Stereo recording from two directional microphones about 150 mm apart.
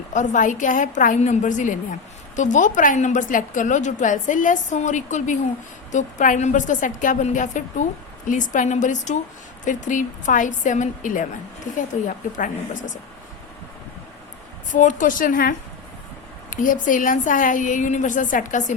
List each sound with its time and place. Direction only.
0.1 s a woman's voice: 55° left (ahead or behind)
14.7 s a woman's voice: 55° left (ahead or behind); by 15.5 s 75° left (ahead or behind)
16.5 s a woman's voice: 60° left (ahead or behind)